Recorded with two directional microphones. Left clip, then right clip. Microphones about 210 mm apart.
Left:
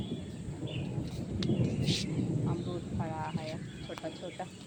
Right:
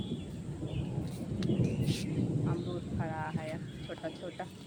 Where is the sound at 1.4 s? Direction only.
5° left (ahead or behind).